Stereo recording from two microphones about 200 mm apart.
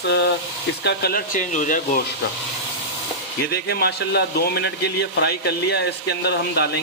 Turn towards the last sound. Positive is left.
turn(degrees=55)  # may be behind; listen again after turning